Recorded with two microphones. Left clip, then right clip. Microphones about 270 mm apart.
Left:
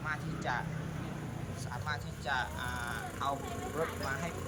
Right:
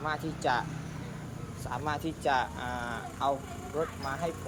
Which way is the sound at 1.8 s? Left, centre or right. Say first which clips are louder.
Right 8 dB; right.